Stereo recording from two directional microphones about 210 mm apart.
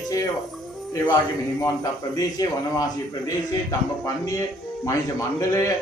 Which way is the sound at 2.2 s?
15° left (ahead or behind).